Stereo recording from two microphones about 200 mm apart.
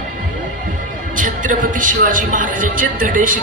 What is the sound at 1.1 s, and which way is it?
A man's voice, 40° right (ahead or behind).